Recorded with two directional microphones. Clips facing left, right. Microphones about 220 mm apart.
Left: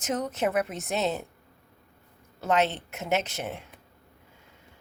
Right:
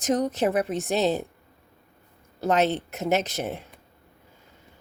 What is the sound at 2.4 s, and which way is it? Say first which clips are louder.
A woman's voice: right 3 dB; 40° right (ahead or behind).